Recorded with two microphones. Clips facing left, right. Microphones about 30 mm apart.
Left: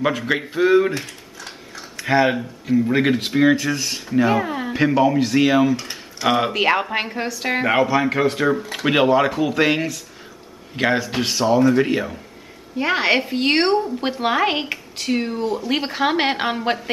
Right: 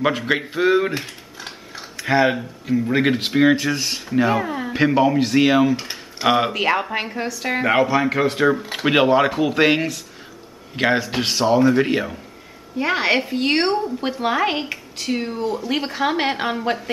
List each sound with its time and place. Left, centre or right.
0.0 s a man's voice: centre
0.9 s mechanisms: right
2.0 s a man's voice: centre
4.3 s speech: centre
4.7 s a man's voice: centre
5.8 s tick-tock: right
6.2 s speech: centre
6.5 s speech: centre
7.6 s a man's voice: centre
12.7 s speech: centre